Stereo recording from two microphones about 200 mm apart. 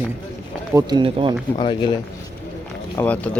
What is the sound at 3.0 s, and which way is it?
Speech, 5° left (ahead or behind).